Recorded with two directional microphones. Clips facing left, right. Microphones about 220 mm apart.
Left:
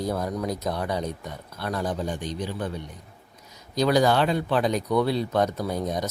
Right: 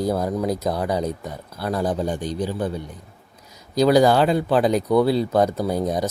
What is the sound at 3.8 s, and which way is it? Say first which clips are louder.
Speech: right 5 dB; 35° right (ahead or behind).